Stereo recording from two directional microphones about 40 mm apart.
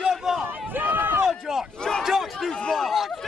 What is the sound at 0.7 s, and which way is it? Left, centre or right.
Run, right.